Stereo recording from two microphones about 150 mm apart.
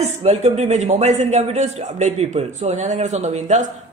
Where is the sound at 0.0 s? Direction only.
50° right (ahead or behind).